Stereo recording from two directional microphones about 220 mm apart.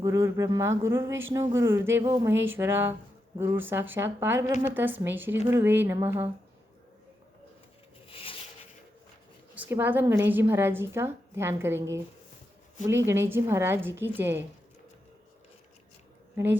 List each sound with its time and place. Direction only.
0.0 s a woman's voice: 15° right (ahead or behind)
8.1 s a sound: 25° left (ahead or behind)
9.6 s a woman's voice: 10° right (ahead or behind)
13.1 s a woman's voice: 10° right (ahead or behind)